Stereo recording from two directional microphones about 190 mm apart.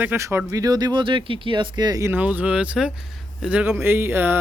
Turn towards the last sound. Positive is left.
turn(degrees=-10)  # may be behind; listen again after turning